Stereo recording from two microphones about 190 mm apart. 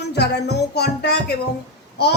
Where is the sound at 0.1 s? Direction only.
60° left (ahead or behind).